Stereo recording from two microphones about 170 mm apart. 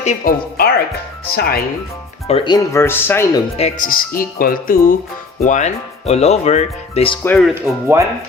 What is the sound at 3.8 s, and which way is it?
Speech, 55° left (ahead or behind).